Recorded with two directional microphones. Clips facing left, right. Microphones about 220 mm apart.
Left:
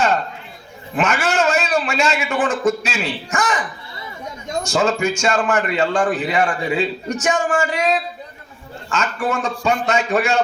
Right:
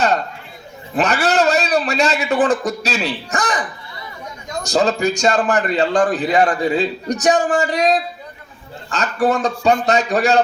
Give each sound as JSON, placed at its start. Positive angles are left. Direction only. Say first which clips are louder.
{"t": 0.9, "sound": "a man's voice", "louder": "right 2 dB", "side_deg": -35}
{"t": 4.6, "sound": "a man's voice", "louder": "right 2 dB", "side_deg": -35}